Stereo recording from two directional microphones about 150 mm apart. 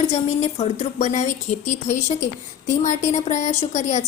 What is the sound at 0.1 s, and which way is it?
A woman's voice, 45° left (ahead or behind).